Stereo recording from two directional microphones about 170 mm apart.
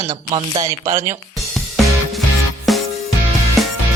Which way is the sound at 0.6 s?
20° right (ahead or behind).